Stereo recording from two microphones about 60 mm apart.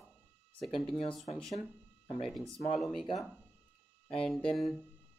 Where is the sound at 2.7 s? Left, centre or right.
Centre.